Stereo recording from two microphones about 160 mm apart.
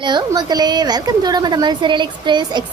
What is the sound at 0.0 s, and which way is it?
A woman's voice, 25° right (ahead or behind).